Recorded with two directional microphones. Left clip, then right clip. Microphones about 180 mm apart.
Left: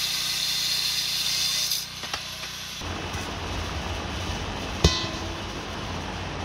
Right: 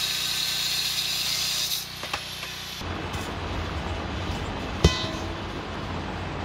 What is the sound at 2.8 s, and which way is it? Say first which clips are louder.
Train: left 1 dB; 55° left (ahead or behind).